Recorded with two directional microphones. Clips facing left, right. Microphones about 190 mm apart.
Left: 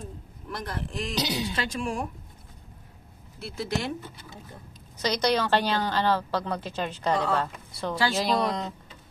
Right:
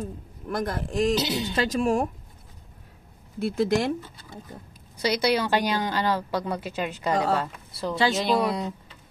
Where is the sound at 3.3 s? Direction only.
50° right (ahead or behind).